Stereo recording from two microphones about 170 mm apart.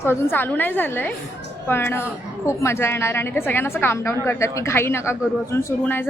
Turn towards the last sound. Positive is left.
turn(degrees=10)  # may be behind; listen again after turning